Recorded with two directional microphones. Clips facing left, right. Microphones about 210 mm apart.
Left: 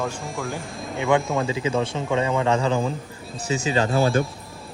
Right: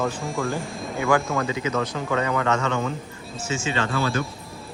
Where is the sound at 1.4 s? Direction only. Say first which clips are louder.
Left 2 dB; 30° left (ahead or behind); by 4.2 s 45° left (ahead or behind).